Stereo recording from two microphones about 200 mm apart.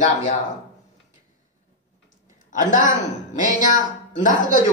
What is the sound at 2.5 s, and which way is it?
Speech, 40° left (ahead or behind).